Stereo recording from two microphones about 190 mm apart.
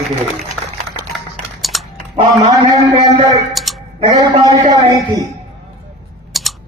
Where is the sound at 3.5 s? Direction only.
Centre (ahead or behind).